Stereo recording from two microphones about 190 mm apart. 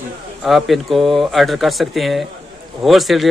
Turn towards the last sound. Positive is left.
turn(degrees=0)  # may be behind; listen again after turning